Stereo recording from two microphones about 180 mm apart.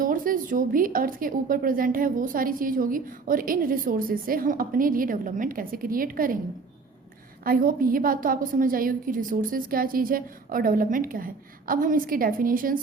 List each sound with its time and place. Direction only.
0.0 s a woman's voice: 50° right (ahead or behind)
7.4 s a woman's voice: 55° right (ahead or behind)